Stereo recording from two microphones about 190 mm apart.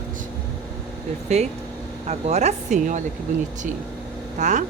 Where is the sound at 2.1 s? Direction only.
35° right (ahead or behind).